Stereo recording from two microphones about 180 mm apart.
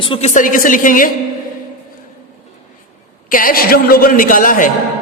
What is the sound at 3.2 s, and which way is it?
A woman's voice, 50° left (ahead or behind).